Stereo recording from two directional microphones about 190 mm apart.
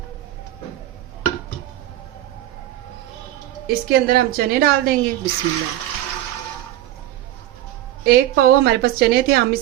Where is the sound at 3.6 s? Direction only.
55° right (ahead or behind).